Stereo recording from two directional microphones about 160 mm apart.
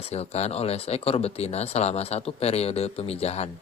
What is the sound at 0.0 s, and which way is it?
Speech, 40° left (ahead or behind).